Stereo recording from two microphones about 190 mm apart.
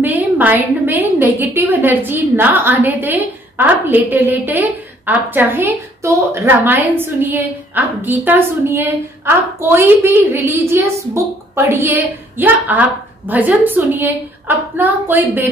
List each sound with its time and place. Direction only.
0.0 s a woman's voice: 10° right (ahead or behind)